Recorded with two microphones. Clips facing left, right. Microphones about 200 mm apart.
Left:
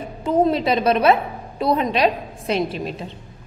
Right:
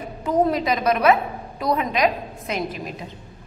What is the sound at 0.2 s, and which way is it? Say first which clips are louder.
A woman's voice: left 2 dB; 25° left (ahead or behind).